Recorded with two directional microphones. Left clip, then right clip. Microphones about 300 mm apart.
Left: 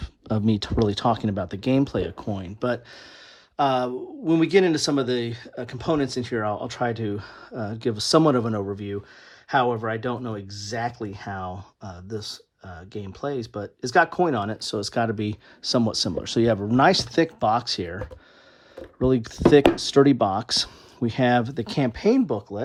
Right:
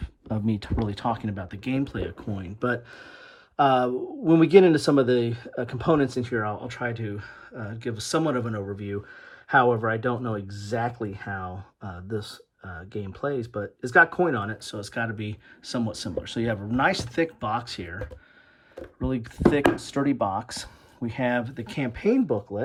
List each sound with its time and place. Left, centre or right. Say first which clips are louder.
0.6 s speech: left 6 dB; centre
19.0 s speech: left 4 dB; centre
20.0 s speech: left 9 dB; right
21.1 s speech: left 5 dB; centre